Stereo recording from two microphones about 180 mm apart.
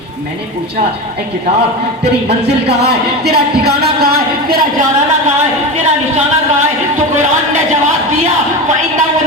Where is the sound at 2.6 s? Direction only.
65° right (ahead or behind).